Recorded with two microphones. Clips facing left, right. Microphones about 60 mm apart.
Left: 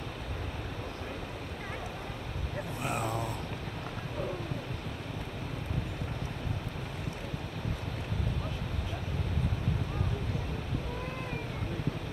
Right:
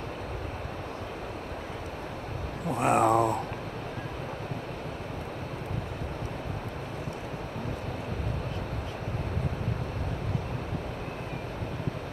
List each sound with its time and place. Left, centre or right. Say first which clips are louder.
2.7 s speech: right 12 dB; right